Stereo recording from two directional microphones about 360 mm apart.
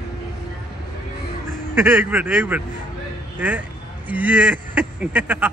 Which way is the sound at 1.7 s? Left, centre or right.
Centre.